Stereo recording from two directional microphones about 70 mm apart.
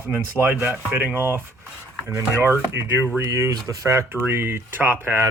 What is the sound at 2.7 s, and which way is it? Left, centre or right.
Speech, right.